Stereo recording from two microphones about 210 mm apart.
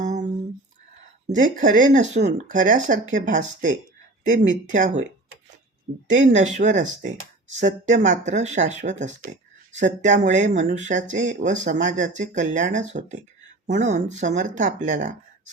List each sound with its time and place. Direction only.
0.0 s a sound: 35° right (ahead or behind)
1.3 s speech: 40° right (ahead or behind)
6.1 s speech: 35° right (ahead or behind)